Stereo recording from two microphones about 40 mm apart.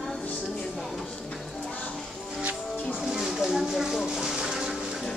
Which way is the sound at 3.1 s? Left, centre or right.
Centre.